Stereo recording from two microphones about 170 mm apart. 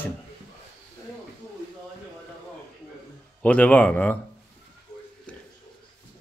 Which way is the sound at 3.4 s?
10° left (ahead or behind).